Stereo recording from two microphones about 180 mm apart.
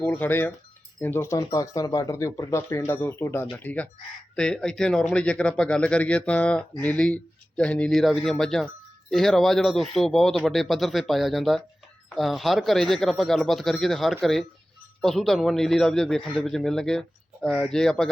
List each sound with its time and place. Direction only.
0.0 s speech: 10° left (ahead or behind)